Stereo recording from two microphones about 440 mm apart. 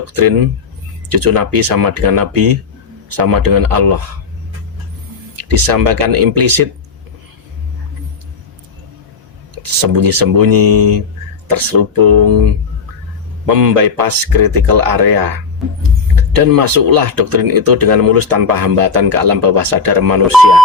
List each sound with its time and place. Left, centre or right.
1.1 s speech: right
5.4 s speech: right
9.8 s speech: right
13.6 s speech: right